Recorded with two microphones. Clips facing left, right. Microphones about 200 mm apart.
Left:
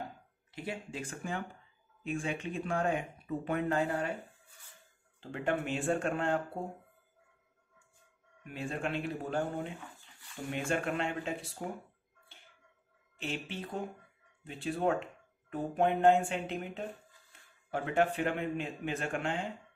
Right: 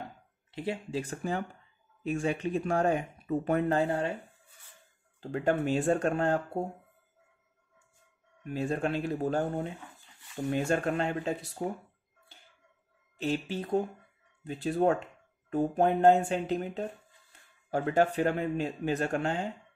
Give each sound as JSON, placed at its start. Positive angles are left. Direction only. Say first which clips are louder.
{"t": 0.5, "sound": "speech", "louder": "right 6 dB", "side_deg": -30}
{"t": 5.3, "sound": "speech", "louder": "right 6 dB", "side_deg": -40}
{"t": 8.5, "sound": "speech", "louder": "right 6 dB", "side_deg": -40}
{"t": 13.2, "sound": "speech", "louder": "right 7 dB", "side_deg": -40}